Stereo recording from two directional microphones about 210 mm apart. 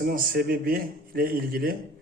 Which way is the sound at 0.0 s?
45° right (ahead or behind).